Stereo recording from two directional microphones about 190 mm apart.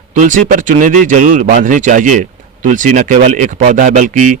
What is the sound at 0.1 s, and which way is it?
Speech, 40° right (ahead or behind).